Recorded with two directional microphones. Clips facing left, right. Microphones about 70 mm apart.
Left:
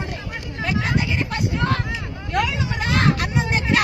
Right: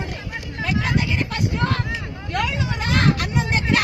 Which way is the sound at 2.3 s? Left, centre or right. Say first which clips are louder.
Left 2 dB; centre.